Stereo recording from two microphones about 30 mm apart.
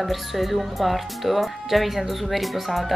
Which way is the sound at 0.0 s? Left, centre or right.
Centre.